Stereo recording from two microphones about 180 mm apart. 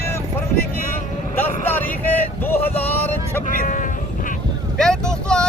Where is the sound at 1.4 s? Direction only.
10° left (ahead or behind).